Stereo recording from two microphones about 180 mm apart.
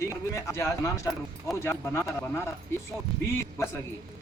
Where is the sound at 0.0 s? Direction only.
15° left (ahead or behind).